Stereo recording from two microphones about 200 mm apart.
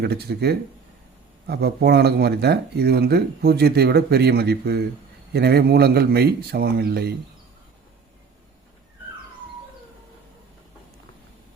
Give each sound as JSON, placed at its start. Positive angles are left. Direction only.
{"t": 0.0, "sound": "speech", "side_deg": -55}